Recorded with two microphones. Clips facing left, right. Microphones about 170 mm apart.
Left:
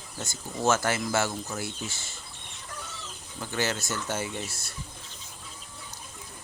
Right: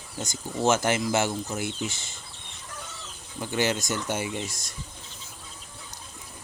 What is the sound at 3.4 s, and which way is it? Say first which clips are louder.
Speech: right 4 dB; 15° right (ahead or behind).